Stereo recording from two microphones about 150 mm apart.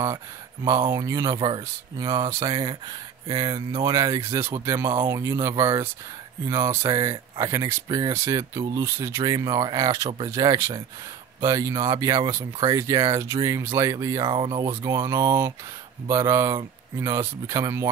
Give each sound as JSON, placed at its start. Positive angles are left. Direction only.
{"t": 0.8, "sound": "speech", "side_deg": -20}
{"t": 14.2, "sound": "speech", "side_deg": -30}
{"t": 14.7, "sound": "speech", "side_deg": -15}